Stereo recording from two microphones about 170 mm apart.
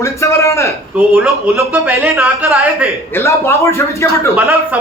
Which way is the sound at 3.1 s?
15° left (ahead or behind).